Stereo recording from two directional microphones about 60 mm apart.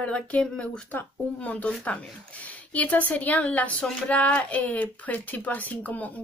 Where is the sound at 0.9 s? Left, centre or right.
Left.